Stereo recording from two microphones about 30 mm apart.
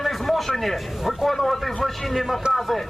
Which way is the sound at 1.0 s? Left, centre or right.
Centre.